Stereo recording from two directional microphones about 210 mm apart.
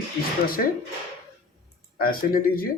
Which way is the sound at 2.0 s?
45° left (ahead or behind).